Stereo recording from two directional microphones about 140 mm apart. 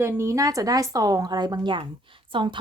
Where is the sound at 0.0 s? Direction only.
20° right (ahead or behind).